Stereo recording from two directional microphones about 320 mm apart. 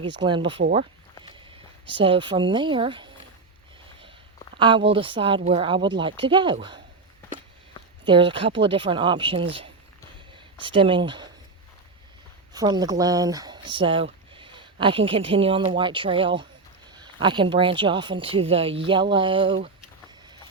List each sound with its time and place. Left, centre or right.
0.2 s speech: centre
1.9 s speech: centre
4.5 s speech: centre
8.0 s speech: centre
12.5 s speech: centre